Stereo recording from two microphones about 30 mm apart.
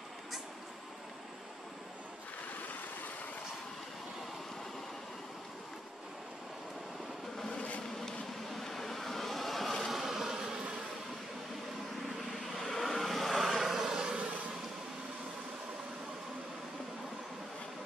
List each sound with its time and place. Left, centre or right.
8.5 s vehicle: centre
9.9 s a sound: centre
12.5 s vehicle: centre